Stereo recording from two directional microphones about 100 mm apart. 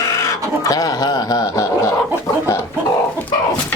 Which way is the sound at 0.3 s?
35° left (ahead or behind).